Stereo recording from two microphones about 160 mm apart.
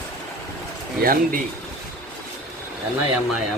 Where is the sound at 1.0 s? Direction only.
65° right (ahead or behind).